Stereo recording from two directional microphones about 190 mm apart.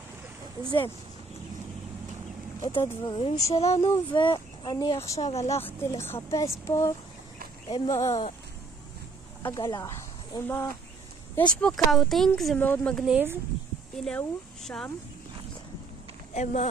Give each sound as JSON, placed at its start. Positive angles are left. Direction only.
{"t": 0.7, "sound": "speech", "side_deg": 20}
{"t": 2.6, "sound": "speech", "side_deg": 25}
{"t": 5.3, "sound": "a woman's voice", "side_deg": 35}
{"t": 5.6, "sound": "speech", "side_deg": 10}
{"t": 9.4, "sound": "speech", "side_deg": 20}
{"t": 11.6, "sound": "speech", "side_deg": 0}
{"t": 14.0, "sound": "speech", "side_deg": 5}